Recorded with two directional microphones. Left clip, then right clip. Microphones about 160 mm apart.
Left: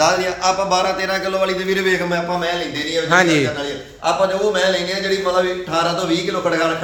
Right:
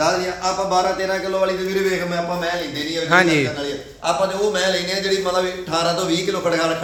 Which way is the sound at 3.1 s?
15° left (ahead or behind).